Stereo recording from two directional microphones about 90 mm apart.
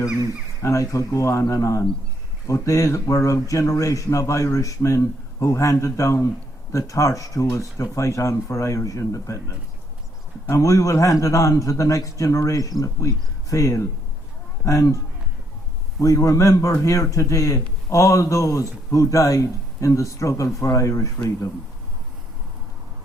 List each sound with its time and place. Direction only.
0.6 s speech: 35° left (ahead or behind)
16.0 s speech: 40° left (ahead or behind)